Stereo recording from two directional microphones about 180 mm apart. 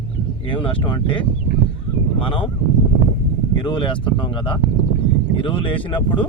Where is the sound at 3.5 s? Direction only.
25° left (ahead or behind).